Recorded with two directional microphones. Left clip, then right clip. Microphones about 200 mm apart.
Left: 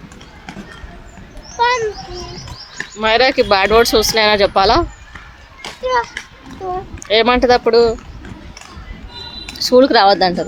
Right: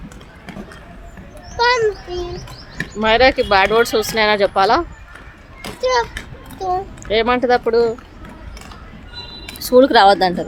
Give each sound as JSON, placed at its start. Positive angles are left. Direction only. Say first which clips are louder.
{"t": 1.5, "sound": "a sound", "louder": "even", "side_deg": -25}
{"t": 3.0, "sound": "speech", "louder": "left 1 dB", "side_deg": 15}
{"t": 5.8, "sound": "children playing", "louder": "even", "side_deg": -20}
{"t": 6.6, "sound": "a woman's voice", "louder": "right 3 dB", "side_deg": -20}
{"t": 7.0, "sound": "speech", "louder": "left 5 dB", "side_deg": 20}
{"t": 9.6, "sound": "speech", "louder": "even", "side_deg": 10}